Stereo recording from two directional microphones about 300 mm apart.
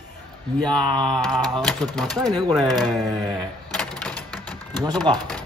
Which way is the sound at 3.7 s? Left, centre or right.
Centre.